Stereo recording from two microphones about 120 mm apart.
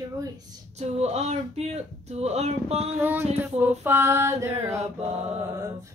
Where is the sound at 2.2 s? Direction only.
65° right (ahead or behind).